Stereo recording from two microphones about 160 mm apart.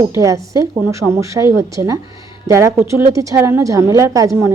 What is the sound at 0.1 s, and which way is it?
A woman's voice, 20° right (ahead or behind).